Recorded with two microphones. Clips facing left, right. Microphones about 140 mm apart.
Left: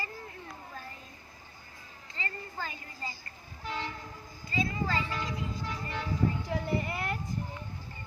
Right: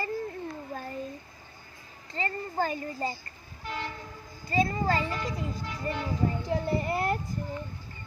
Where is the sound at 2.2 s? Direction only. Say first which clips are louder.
Right 9 dB; 45° right (ahead or behind).